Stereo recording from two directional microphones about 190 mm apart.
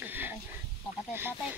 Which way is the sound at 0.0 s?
10° right (ahead or behind).